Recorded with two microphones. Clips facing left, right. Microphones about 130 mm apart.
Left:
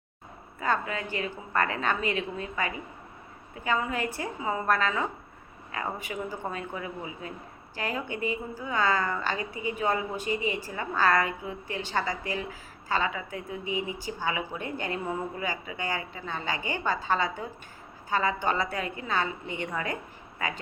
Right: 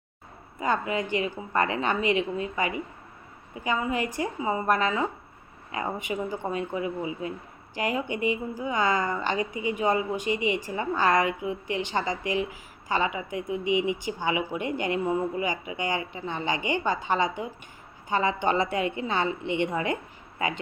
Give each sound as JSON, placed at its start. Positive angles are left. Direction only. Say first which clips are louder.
{"t": 0.6, "sound": "a woman's voice", "louder": "right 3 dB", "side_deg": -15}